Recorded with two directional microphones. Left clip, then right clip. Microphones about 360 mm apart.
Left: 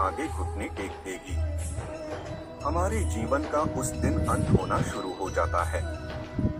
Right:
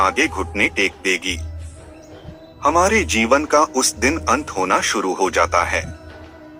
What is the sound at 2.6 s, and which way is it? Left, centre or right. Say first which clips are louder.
Speech: right 14 dB; right.